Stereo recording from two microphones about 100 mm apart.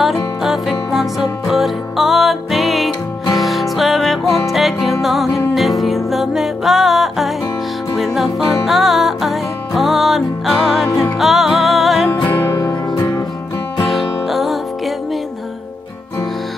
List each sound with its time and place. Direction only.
0.0 s music: centre (ahead or behind)
12.2 s music: 40° left (ahead or behind)
13.8 s music: centre (ahead or behind)